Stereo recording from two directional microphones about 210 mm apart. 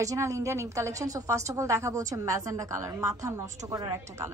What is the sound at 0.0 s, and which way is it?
A woman's voice, 15° right (ahead or behind).